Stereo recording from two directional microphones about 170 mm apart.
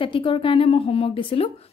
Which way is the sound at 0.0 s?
30° left (ahead or behind).